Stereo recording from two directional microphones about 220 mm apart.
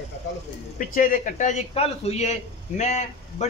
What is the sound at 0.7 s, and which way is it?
A man's voice, 40° left (ahead or behind).